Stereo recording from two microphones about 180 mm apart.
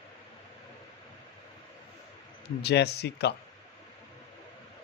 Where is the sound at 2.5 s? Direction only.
65° left (ahead or behind).